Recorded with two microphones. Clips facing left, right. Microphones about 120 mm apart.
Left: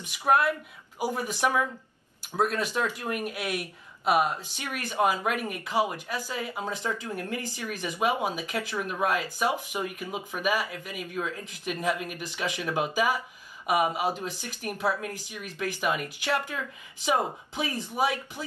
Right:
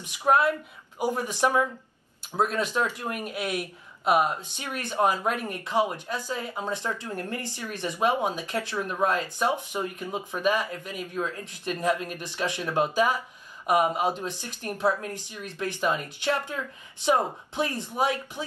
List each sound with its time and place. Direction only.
0.9 s speech: 5° left (ahead or behind)